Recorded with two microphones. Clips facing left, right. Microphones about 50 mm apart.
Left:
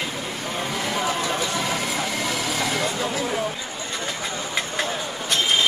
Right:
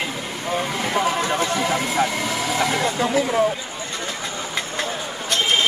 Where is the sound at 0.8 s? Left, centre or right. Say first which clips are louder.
Right 4 dB; right.